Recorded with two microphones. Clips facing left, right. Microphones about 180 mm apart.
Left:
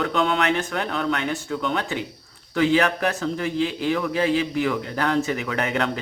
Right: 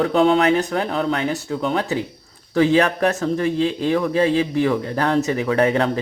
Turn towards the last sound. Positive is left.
turn(degrees=-30)  # may be behind; listen again after turning